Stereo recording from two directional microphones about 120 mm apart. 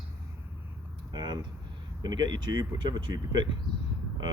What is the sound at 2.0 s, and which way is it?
Speech, 35° right (ahead or behind).